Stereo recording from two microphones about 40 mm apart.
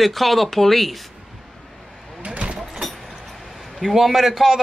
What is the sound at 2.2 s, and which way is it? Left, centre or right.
Vehicle, right.